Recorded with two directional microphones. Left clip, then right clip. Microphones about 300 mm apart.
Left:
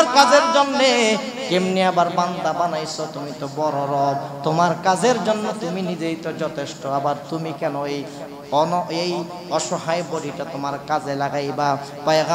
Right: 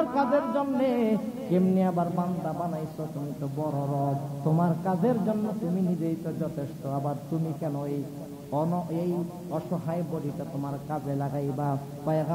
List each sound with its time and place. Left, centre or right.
0.0 s speech: centre